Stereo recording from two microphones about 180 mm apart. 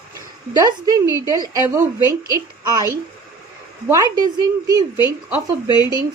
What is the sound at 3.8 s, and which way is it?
Speech, 20° right (ahead or behind).